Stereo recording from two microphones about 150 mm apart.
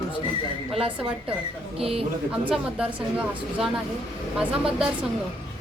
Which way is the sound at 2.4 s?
10° right (ahead or behind).